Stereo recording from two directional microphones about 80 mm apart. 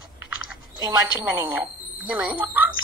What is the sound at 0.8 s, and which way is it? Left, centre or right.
Speech, right.